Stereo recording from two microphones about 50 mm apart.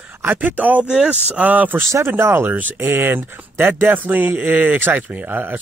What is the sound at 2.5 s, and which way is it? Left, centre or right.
Speech, right.